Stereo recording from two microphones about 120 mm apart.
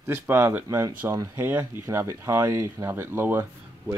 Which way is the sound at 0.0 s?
20° right (ahead or behind).